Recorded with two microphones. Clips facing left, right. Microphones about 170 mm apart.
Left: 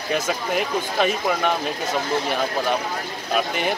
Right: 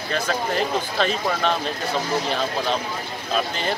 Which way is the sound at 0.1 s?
10° left (ahead or behind).